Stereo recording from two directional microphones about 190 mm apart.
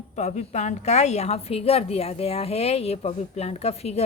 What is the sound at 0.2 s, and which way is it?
A woman's voice, 35° left (ahead or behind).